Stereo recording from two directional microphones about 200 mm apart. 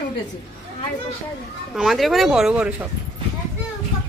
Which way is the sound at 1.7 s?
Centre (ahead or behind).